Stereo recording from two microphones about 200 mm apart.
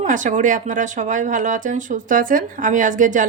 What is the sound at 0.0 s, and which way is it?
Speech, 40° right (ahead or behind).